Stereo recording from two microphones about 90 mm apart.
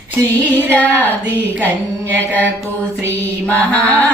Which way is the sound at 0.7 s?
15° left (ahead or behind).